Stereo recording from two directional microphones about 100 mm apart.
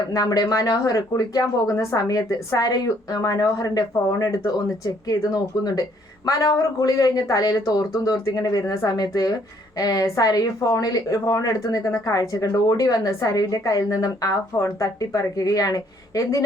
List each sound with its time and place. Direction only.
0.1 s a woman's voice: 40° left (ahead or behind)